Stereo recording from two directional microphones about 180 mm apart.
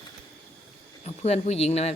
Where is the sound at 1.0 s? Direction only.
35° left (ahead or behind).